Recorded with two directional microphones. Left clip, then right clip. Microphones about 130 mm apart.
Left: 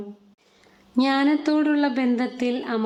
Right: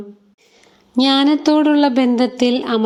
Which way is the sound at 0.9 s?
30° right (ahead or behind).